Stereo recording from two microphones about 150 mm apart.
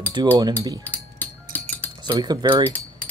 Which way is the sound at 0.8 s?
10° left (ahead or behind).